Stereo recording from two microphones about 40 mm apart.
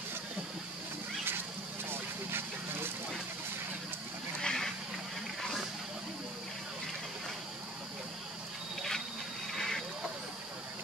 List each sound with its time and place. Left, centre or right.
1.9 s vehicle: right
4.4 s a sound: centre
9.5 s vehicle: centre